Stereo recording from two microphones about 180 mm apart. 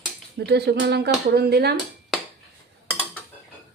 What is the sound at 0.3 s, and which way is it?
Speech, 65° right (ahead or behind).